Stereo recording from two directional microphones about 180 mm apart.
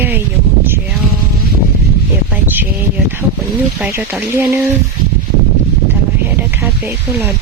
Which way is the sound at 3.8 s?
10° right (ahead or behind).